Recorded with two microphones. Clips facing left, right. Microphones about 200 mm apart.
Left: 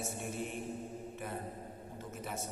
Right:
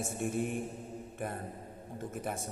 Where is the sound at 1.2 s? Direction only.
50° right (ahead or behind).